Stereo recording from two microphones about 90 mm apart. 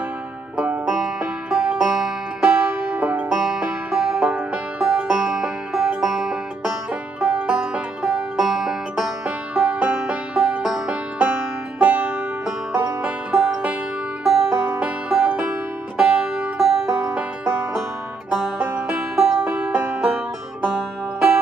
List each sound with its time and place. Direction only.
0.6 s music: 10° right (ahead or behind)
2.6 s banjo: 20° right (ahead or behind)
3.4 s music: 10° right (ahead or behind)
18.3 s music: 10° right (ahead or behind)